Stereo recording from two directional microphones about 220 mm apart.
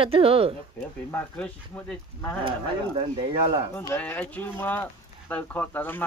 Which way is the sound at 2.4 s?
25° right (ahead or behind).